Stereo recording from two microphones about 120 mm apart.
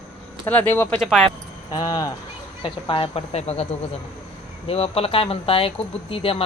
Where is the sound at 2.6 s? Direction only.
45° left (ahead or behind).